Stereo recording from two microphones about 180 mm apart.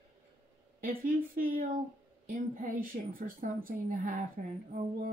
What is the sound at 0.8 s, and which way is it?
A woman's voice, 50° right (ahead or behind).